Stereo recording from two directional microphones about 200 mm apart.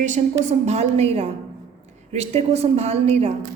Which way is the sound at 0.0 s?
35° right (ahead or behind).